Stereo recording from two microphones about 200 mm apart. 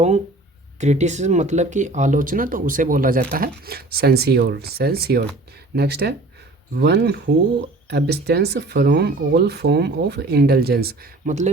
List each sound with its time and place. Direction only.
0.8 s speech: 35° right (ahead or behind); by 11.3 s 50° right (ahead or behind)